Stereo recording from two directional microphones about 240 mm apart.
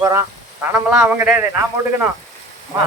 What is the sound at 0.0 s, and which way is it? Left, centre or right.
A man's voice, centre.